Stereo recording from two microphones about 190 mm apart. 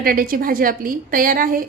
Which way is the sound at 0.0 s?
50° right (ahead or behind).